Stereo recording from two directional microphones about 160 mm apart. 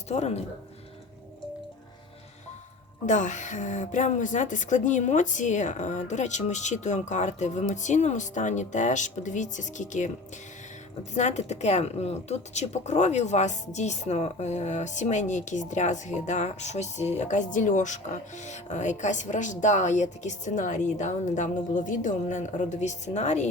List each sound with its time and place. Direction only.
0.1 s a woman's voice: 45° left (ahead or behind)
3.1 s a woman's voice: 50° left (ahead or behind)
11.1 s a woman's voice: 45° left (ahead or behind)